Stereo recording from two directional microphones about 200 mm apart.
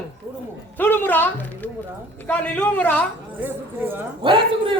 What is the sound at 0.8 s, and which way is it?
A man's voice, 10° left (ahead or behind).